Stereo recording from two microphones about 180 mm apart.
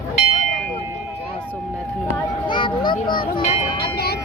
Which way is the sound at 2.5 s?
25° left (ahead or behind).